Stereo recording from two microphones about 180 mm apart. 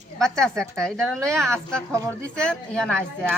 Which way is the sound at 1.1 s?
15° right (ahead or behind).